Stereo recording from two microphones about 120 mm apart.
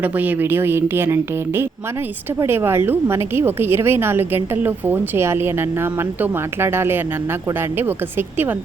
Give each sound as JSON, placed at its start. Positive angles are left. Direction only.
{"t": 0.0, "sound": "a woman's voice", "side_deg": -15}